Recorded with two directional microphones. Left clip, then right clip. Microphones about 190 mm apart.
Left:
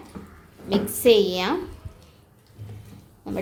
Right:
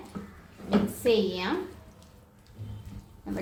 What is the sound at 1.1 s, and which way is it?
Speech, 60° left (ahead or behind).